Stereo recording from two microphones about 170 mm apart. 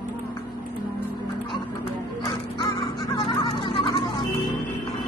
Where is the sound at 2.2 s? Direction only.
20° left (ahead or behind).